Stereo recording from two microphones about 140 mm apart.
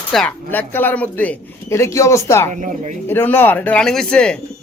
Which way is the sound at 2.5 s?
60° right (ahead or behind).